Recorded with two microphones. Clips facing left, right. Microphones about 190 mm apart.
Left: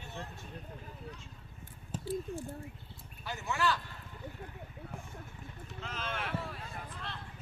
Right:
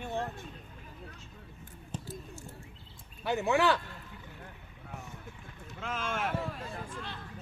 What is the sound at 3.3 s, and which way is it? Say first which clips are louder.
Speech: right 7 dB; 65° right (ahead or behind).